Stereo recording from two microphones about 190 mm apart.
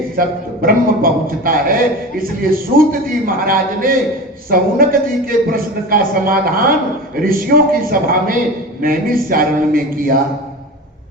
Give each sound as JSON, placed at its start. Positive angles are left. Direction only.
{"t": 0.2, "sound": "a man's voice", "side_deg": -50}